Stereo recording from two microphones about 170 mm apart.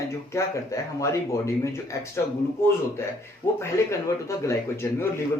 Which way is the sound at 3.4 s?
20° left (ahead or behind).